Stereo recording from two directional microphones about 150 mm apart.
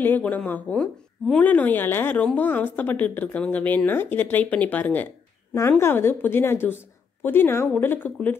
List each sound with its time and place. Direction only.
0.0 s a woman's voice: 10° left (ahead or behind)